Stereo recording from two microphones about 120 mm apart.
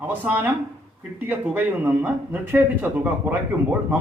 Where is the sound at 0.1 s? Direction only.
15° right (ahead or behind).